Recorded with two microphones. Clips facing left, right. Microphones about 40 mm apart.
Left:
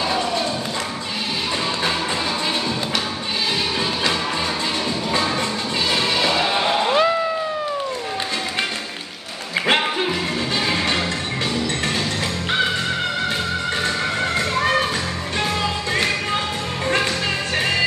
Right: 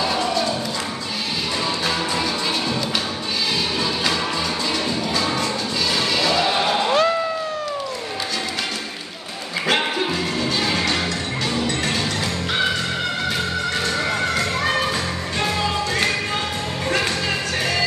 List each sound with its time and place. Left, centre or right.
5.9 s music: left
6.3 s music: centre